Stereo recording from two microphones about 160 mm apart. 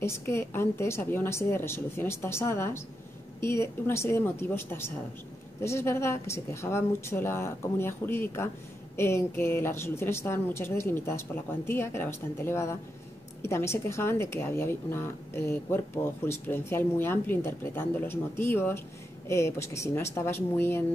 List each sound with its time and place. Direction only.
0.0 s speech: 15° left (ahead or behind)